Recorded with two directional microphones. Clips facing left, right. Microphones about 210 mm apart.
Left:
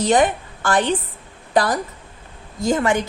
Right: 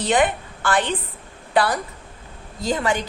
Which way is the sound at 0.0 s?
40° left (ahead or behind).